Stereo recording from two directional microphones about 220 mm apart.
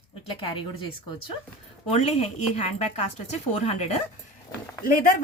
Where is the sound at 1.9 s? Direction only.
30° left (ahead or behind).